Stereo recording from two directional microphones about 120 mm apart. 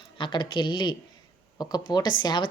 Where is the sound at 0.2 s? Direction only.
40° left (ahead or behind).